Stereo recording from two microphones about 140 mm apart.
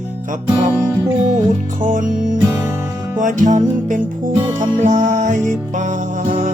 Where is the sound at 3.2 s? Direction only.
60° right (ahead or behind).